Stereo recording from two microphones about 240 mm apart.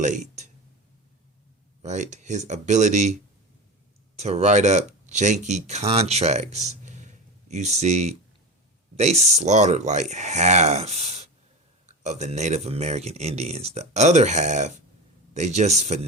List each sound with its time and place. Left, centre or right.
0.0 s a sound: right
1.8 s speech: right
4.2 s speech: right